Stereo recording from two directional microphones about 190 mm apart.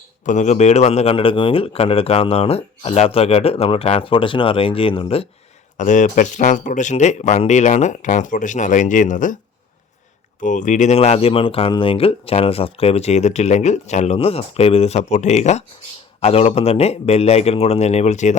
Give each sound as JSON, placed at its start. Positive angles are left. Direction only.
{"t": 0.3, "sound": "speech", "side_deg": 40}
{"t": 5.7, "sound": "speech", "side_deg": 40}
{"t": 10.4, "sound": "speech", "side_deg": 40}